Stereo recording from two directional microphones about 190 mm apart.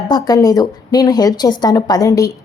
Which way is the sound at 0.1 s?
20° left (ahead or behind).